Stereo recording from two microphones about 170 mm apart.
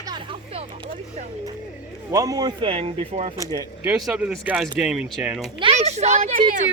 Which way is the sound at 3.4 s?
20° right (ahead or behind).